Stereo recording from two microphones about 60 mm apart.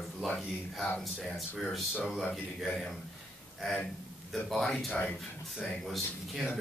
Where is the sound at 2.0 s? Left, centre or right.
Centre.